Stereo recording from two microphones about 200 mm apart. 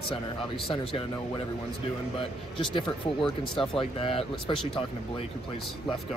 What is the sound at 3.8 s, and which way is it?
Speech, 25° left (ahead or behind).